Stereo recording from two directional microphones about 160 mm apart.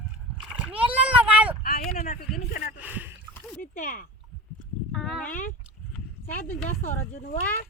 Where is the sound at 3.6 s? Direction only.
60° left (ahead or behind).